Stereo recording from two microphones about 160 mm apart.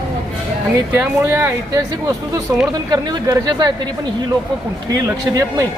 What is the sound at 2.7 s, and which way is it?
Speech, 25° right (ahead or behind).